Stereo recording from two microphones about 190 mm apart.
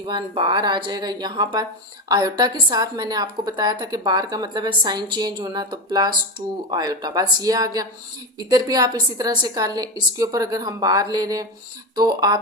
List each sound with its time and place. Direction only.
0.0 s a woman's voice: 25° right (ahead or behind)